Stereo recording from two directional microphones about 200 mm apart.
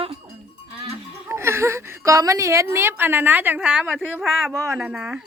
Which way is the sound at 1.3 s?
15° right (ahead or behind).